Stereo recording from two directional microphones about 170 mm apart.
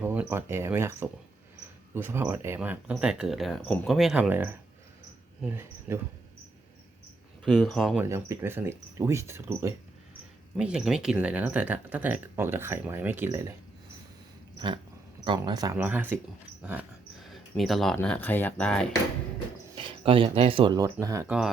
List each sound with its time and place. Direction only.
0.0 s speech: 10° right (ahead or behind)
7.4 s speech: centre (ahead or behind)
8.0 s speech: 15° right (ahead or behind)
10.6 s speech: 5° right (ahead or behind)
15.2 s speech: 25° right (ahead or behind)
15.8 s speech: 10° right (ahead or behind)
16.6 s dog: 5° right (ahead or behind)
17.6 s speech: centre (ahead or behind)
19.7 s speech: 30° right (ahead or behind)
21.2 s speech: 5° right (ahead or behind)